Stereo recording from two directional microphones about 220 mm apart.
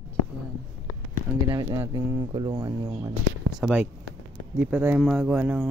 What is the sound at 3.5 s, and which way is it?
Speech, 5° right (ahead or behind).